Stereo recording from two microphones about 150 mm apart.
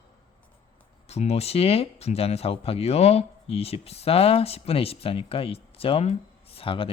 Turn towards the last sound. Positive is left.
turn(degrees=35)  # may be behind; listen again after turning